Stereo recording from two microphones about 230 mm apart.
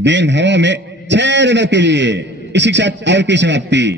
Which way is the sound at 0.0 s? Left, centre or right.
Right.